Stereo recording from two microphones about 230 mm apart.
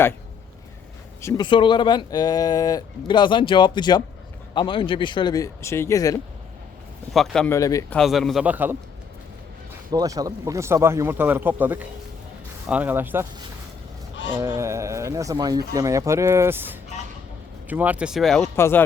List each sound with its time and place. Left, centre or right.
1.2 s speech: centre
7.1 s speech: centre
7.9 s speech: centre
9.9 s speech: centre
14.3 s speech: centre